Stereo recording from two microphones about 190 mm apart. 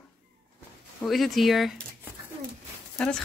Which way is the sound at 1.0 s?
Centre (ahead or behind).